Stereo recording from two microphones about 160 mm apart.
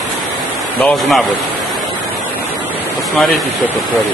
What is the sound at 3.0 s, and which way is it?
Speech, centre (ahead or behind).